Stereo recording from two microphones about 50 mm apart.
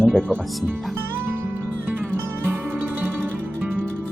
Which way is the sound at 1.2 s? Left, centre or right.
Right.